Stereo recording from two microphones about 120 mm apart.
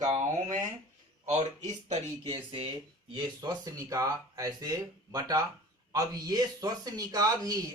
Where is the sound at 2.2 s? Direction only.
50° right (ahead or behind).